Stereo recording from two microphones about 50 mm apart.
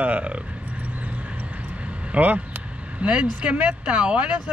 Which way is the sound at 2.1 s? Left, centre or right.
Right.